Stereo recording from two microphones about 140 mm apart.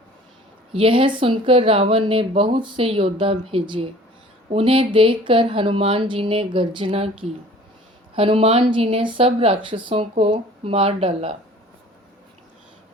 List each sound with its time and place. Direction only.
0.7 s speech: 40° right (ahead or behind)